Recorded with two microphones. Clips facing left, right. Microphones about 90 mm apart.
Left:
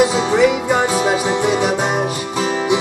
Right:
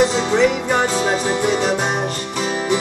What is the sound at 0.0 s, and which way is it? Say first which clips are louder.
Music: left 2 dB; 5° left (ahead or behind).